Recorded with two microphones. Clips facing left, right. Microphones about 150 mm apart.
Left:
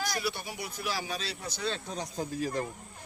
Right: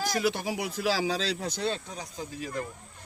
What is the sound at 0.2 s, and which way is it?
Speech, 90° right.